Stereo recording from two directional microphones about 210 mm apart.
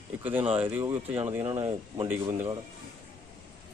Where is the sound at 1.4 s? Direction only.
30° right (ahead or behind).